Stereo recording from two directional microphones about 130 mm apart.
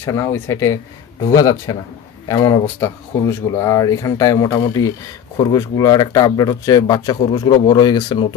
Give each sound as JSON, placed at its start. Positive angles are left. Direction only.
{"t": 0.0, "sound": "speech", "side_deg": 20}